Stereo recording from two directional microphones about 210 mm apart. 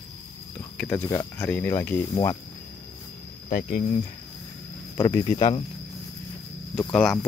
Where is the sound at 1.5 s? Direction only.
10° left (ahead or behind).